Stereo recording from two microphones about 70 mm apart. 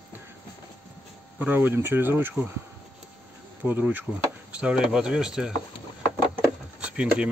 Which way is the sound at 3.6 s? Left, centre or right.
Right.